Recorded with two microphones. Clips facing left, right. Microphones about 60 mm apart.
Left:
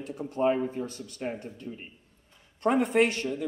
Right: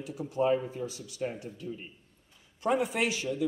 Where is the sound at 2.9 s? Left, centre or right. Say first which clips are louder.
Left 7 dB; left.